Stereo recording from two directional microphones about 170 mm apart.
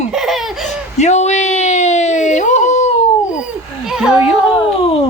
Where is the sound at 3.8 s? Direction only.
5° right (ahead or behind).